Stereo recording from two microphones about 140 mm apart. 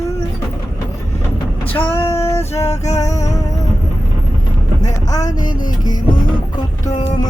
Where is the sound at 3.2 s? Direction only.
25° left (ahead or behind).